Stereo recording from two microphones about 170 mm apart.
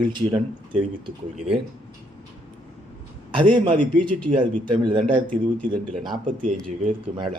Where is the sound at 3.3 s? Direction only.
30° right (ahead or behind).